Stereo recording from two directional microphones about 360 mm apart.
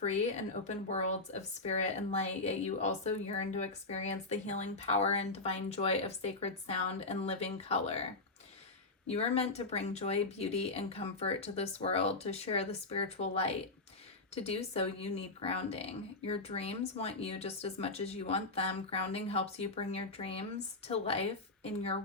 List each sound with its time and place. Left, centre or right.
0.0 s a woman's voice: centre
9.0 s speech: centre